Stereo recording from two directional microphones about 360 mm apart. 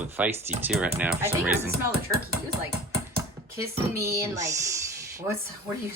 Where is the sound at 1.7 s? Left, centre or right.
Right.